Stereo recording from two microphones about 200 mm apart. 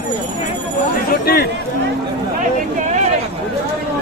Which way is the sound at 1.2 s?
50° left (ahead or behind).